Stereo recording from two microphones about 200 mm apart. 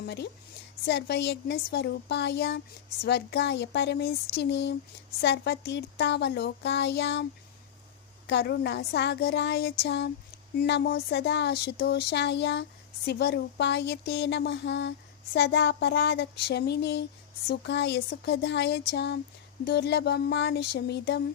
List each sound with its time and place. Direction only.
0.0 s a woman's voice: 55° left (ahead or behind)
8.3 s speech: 60° left (ahead or behind)